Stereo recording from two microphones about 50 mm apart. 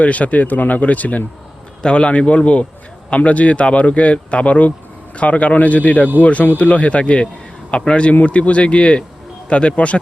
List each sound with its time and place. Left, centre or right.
0.0 s speech: left